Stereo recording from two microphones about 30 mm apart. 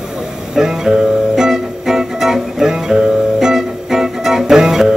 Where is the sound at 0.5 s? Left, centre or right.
Centre.